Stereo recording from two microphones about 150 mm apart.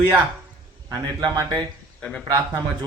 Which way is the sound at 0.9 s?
25° right (ahead or behind).